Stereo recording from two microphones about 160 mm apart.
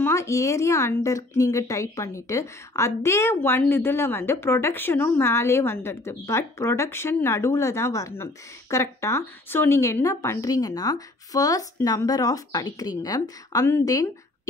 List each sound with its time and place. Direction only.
0.0 s a woman's voice: 15° left (ahead or behind)